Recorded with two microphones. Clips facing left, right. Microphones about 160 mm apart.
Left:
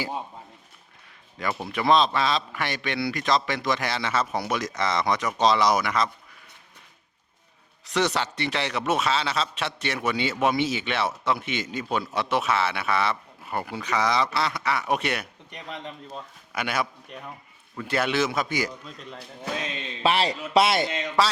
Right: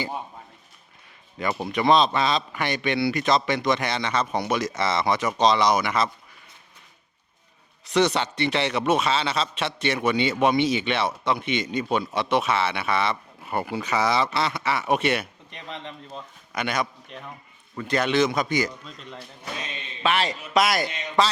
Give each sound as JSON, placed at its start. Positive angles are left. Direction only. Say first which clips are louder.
{"t": 1.4, "sound": "a man's voice", "louder": "right 3 dB", "side_deg": 0}
{"t": 7.9, "sound": "a man's voice", "louder": "right 3 dB", "side_deg": 0}
{"t": 20.0, "sound": "a man's voice", "louder": "left 1 dB", "side_deg": 35}